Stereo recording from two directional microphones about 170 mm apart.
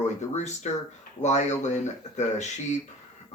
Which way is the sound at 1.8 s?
45° left (ahead or behind).